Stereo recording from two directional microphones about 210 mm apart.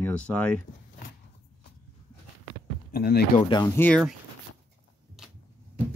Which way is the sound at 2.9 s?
50° left (ahead or behind).